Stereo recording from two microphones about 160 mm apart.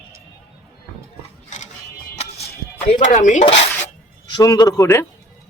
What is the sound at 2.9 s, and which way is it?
Speech, 45° left (ahead or behind).